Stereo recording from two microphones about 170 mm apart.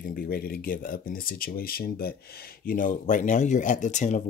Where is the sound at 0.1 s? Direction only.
60° left (ahead or behind).